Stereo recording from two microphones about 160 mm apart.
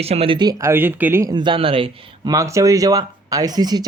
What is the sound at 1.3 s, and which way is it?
Speech, 30° right (ahead or behind).